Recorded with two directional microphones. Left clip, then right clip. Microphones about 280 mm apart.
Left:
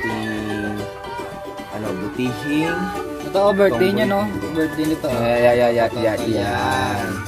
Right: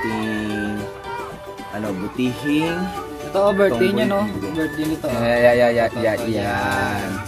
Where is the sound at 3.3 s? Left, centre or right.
Centre.